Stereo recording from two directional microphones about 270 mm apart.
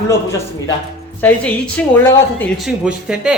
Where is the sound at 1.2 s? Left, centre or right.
Centre.